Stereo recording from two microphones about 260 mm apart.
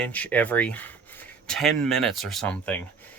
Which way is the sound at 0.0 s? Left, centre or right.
Centre.